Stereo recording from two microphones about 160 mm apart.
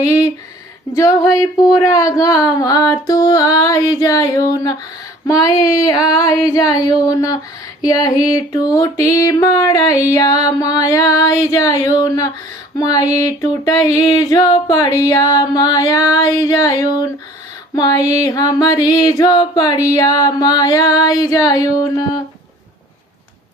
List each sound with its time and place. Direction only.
1.4 s music: 20° left (ahead or behind)